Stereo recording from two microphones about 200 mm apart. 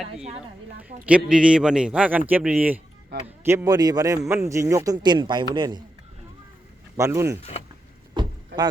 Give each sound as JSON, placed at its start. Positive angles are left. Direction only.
{"t": 1.0, "sound": "a man's voice", "side_deg": -5}
{"t": 6.9, "sound": "speech", "side_deg": -15}
{"t": 8.2, "sound": "rowboat", "side_deg": -25}